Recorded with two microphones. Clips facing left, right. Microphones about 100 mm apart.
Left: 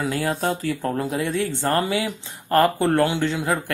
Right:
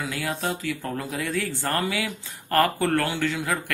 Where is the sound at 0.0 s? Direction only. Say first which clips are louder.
Left 5 dB; 35° left (ahead or behind).